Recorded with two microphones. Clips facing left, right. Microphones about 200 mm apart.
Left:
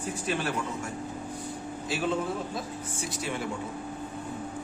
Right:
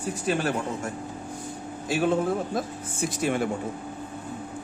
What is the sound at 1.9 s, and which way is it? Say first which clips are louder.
Speech: right 6 dB; 50° right (ahead or behind).